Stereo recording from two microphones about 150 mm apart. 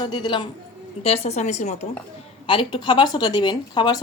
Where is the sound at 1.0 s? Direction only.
45° left (ahead or behind).